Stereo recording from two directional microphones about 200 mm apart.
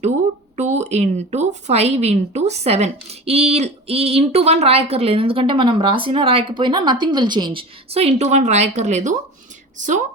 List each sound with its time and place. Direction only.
0.5 s a woman's voice: 35° right (ahead or behind)